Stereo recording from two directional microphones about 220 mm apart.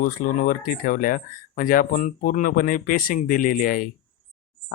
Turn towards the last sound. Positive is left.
turn(degrees=40)  # may be behind; listen again after turning